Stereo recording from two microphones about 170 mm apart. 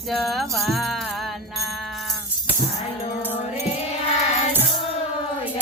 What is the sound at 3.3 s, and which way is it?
Music, 40° left (ahead or behind).